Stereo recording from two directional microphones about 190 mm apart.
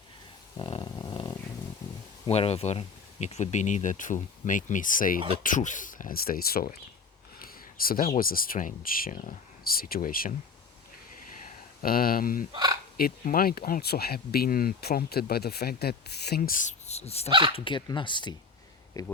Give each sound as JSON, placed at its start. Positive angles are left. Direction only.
{"t": 0.5, "sound": "dog", "side_deg": 25}
{"t": 2.2, "sound": "speech", "side_deg": 30}
{"t": 11.4, "sound": "speech", "side_deg": 50}
{"t": 17.2, "sound": "speech", "side_deg": -25}
{"t": 17.5, "sound": "speech", "side_deg": 25}